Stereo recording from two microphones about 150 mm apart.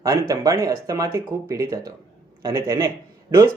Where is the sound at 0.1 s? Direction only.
20° right (ahead or behind).